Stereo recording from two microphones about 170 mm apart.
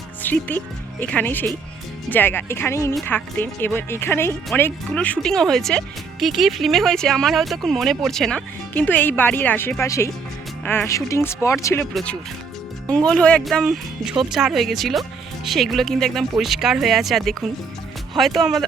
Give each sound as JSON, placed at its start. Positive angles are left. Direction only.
{"t": 0.2, "sound": "speech", "side_deg": 10}
{"t": 11.8, "sound": "speech", "side_deg": 5}